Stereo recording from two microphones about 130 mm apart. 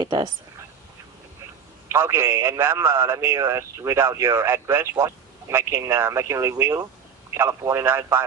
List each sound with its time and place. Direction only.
0.0 s speech: 35° right (ahead or behind)
1.9 s a man's voice: 20° right (ahead or behind)